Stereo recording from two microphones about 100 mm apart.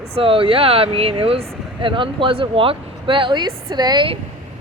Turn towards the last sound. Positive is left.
turn(degrees=-45)  # may be behind; listen again after turning